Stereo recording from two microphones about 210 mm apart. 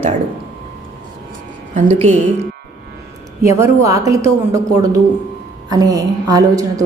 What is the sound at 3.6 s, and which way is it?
A woman's voice, 15° right (ahead or behind).